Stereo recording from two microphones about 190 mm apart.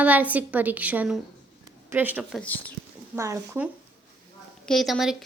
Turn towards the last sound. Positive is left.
turn(degrees=0)  # may be behind; listen again after turning